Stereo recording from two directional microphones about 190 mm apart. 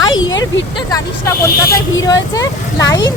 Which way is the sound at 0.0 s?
90° left.